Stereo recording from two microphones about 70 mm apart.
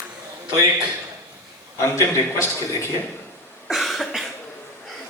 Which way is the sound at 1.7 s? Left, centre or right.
Left.